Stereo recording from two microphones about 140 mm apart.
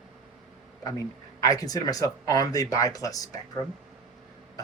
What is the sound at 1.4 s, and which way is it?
Speech, 25° left (ahead or behind).